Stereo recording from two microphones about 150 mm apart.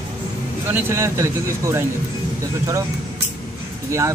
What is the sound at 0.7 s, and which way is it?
Speech, 15° right (ahead or behind).